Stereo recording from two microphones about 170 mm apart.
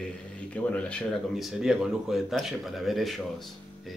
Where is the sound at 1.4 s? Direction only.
5° right (ahead or behind).